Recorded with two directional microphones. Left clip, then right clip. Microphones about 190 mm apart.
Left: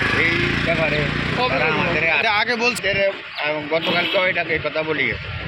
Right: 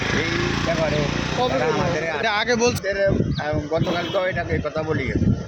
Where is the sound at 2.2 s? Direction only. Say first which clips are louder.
Left 1 dB; 60° right (ahead or behind).